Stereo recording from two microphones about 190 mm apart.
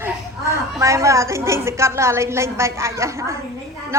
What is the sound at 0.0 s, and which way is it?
A woman's voice, 15° right (ahead or behind).